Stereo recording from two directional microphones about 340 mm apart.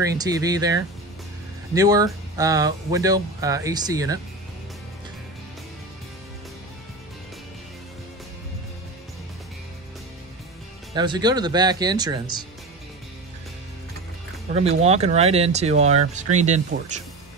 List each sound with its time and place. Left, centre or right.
0.0 s speech: centre
11.0 s speech: centre
14.5 s speech: centre